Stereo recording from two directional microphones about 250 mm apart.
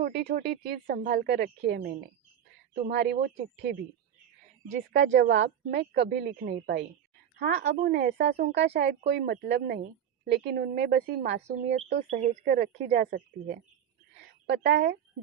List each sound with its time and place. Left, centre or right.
0.0 s a woman's voice: right
12.1 s a woman's voice: right
14.4 s speech: right